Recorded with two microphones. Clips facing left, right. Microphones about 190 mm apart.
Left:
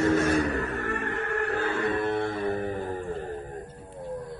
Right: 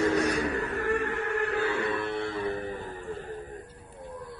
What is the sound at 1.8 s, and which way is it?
Music, 40° left (ahead or behind).